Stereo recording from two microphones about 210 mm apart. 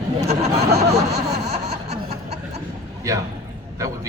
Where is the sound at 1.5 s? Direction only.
30° right (ahead or behind).